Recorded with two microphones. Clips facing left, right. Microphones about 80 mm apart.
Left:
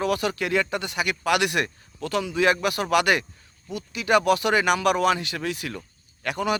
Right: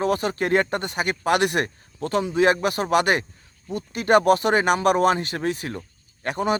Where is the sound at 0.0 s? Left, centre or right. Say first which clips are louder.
Right 2 dB; right.